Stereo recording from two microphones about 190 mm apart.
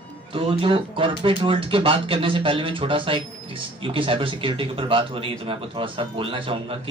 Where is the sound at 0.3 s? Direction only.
30° right (ahead or behind).